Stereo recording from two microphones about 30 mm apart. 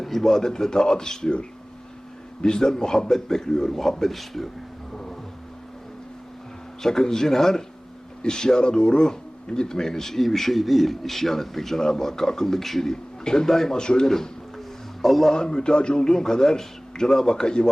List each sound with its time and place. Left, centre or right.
0.0 s speech: centre
0.3 s a man's voice: centre
2.4 s a man's voice: left
6.8 s speech: centre
11.8 s speech: centre
12.9 s a man's voice: left
13.7 s a man's voice: left
15.0 s speech: centre
15.3 s a man's voice: left
16.0 s a man's voice: left